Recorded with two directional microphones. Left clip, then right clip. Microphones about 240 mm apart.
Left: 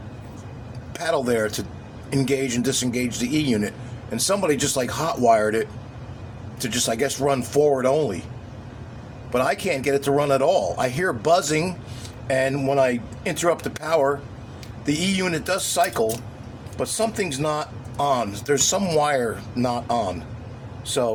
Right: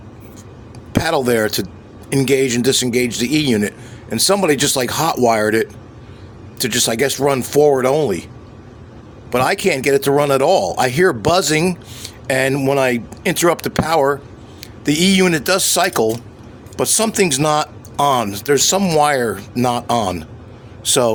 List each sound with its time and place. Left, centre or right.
0.9 s speech: right
9.3 s speech: right